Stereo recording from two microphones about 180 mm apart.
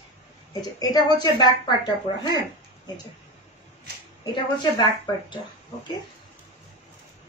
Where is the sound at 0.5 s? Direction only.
20° left (ahead or behind).